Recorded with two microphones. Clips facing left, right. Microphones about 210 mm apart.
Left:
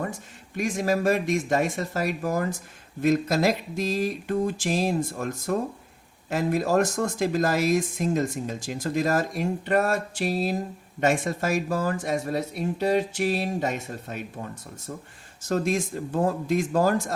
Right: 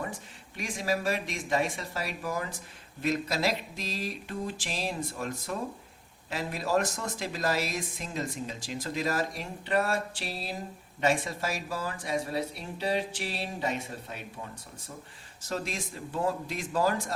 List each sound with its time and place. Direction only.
0.5 s speech: 50° left (ahead or behind)
15.4 s speech: 45° left (ahead or behind)